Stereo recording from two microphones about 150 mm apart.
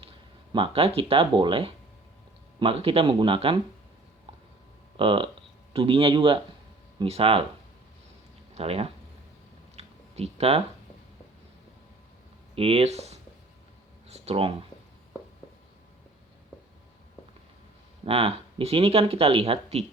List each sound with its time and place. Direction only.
0.5 s speech: 40° right (ahead or behind)
4.9 s speech: 35° right (ahead or behind)
8.5 s speech: 40° right (ahead or behind)
9.7 s a sound: 45° right (ahead or behind)
12.5 s speech: 40° right (ahead or behind)
18.0 s speech: 40° right (ahead or behind)